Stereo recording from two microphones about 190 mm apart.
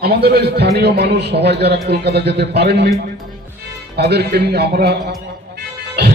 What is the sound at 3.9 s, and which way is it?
Music, 60° right (ahead or behind).